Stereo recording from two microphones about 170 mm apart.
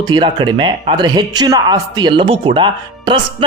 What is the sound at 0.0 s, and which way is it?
A man's voice, 25° right (ahead or behind).